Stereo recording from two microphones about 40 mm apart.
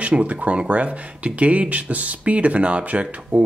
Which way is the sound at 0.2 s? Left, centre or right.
Right.